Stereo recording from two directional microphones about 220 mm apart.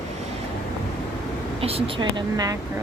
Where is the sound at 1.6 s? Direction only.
25° right (ahead or behind).